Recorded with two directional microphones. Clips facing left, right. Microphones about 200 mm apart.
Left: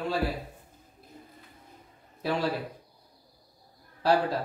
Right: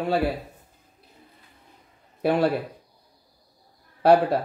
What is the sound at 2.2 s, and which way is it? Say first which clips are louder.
Speech: right 8 dB; 60° right (ahead or behind).